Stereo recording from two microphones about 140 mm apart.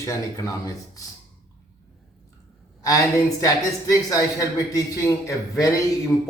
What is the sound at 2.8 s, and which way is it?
Speech, 25° left (ahead or behind).